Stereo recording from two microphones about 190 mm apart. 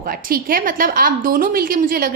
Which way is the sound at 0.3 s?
50° right (ahead or behind).